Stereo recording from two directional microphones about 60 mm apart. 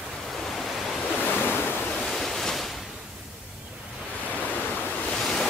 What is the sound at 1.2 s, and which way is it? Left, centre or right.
Waves, left.